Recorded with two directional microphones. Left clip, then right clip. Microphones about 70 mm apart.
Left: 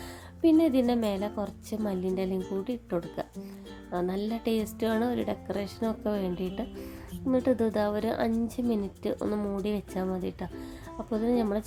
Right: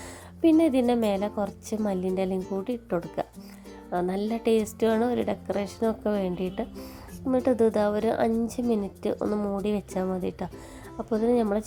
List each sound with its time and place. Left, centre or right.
0.4 s a woman's voice: right